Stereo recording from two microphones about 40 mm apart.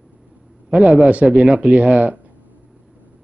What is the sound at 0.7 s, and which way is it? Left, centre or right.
Speech, right.